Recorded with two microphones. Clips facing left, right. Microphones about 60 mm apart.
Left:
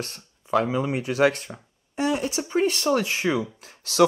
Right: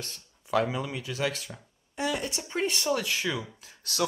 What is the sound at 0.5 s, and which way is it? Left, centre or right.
Speech, centre.